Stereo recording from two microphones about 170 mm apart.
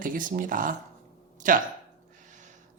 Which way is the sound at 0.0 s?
50° right (ahead or behind).